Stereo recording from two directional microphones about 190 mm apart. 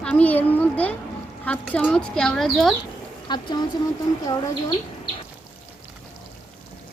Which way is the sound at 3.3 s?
25° left (ahead or behind).